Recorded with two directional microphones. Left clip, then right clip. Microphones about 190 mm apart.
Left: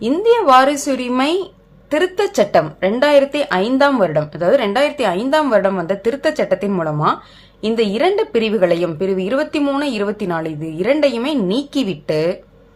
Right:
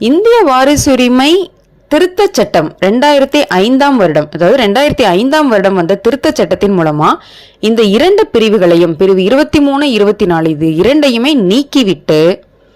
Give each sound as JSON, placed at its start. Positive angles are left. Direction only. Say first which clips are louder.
{"t": 0.1, "sound": "a woman's voice", "louder": "right 4 dB", "side_deg": -35}